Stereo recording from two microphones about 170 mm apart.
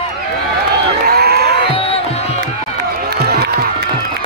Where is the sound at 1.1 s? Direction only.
70° right (ahead or behind).